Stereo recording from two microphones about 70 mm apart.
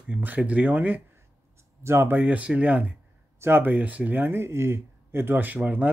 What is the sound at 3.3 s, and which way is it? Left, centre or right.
Speech, right.